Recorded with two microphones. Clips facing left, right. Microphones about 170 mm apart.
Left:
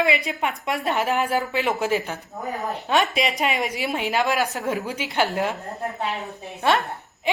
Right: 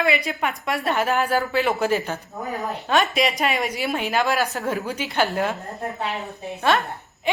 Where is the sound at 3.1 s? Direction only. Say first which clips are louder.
Right 1 dB; 20° left (ahead or behind).